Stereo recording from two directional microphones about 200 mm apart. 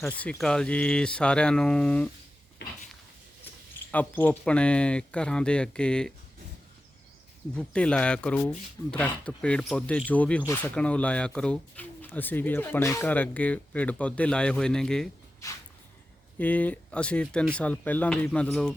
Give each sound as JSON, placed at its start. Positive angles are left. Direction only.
{"t": 0.2, "sound": "speech", "side_deg": 5}
{"t": 2.6, "sound": "a sound", "side_deg": 55}
{"t": 3.9, "sound": "speech", "side_deg": 10}
{"t": 7.5, "sound": "speech", "side_deg": 5}
{"t": 16.4, "sound": "speech", "side_deg": 10}